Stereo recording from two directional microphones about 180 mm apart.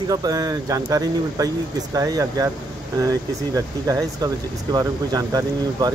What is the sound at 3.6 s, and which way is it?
Speech, 20° right (ahead or behind).